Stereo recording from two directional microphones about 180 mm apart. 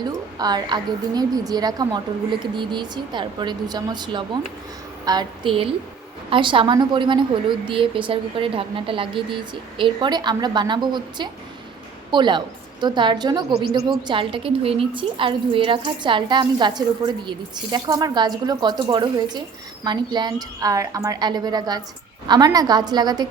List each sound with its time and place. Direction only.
0.3 s a woman's voice: 20° right (ahead or behind)